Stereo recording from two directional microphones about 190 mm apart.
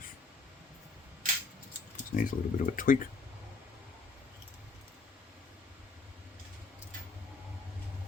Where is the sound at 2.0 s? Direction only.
45° left (ahead or behind).